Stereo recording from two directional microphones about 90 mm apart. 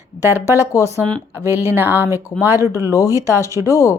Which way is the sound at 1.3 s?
25° right (ahead or behind).